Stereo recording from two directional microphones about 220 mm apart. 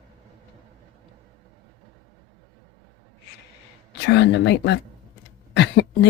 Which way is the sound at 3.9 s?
50° left (ahead or behind).